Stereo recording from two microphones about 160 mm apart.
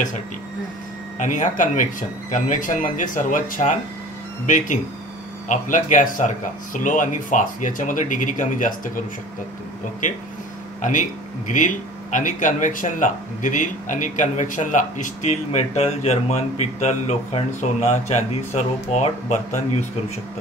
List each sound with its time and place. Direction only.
1.2 s speech: 50° left (ahead or behind)
10.8 s speech: 50° left (ahead or behind)